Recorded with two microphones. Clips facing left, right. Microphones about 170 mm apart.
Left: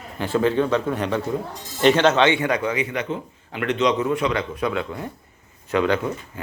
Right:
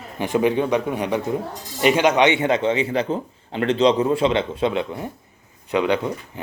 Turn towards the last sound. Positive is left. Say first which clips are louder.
# even
turn(degrees=-15)  # may be behind; listen again after turning